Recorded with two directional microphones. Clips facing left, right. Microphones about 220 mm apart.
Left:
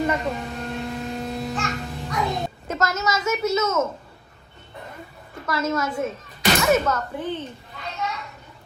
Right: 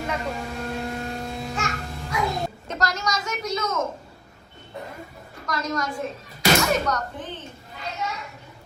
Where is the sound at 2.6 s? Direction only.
5° left (ahead or behind).